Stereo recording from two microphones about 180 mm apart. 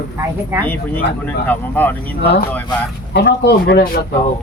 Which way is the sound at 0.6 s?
10° left (ahead or behind).